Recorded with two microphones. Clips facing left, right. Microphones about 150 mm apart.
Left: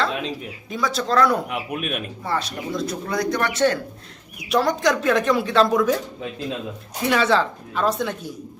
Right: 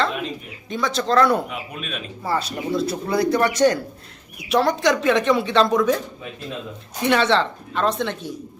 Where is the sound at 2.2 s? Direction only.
5° right (ahead or behind).